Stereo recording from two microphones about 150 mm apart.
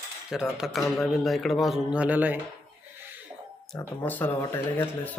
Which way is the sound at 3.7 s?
10° left (ahead or behind).